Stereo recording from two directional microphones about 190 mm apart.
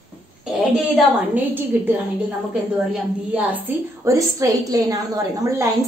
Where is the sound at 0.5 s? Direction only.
Centre (ahead or behind); by 5.7 s 20° right (ahead or behind).